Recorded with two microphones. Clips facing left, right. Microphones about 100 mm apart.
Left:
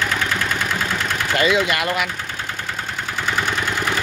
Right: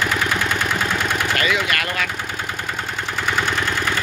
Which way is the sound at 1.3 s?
20° left (ahead or behind).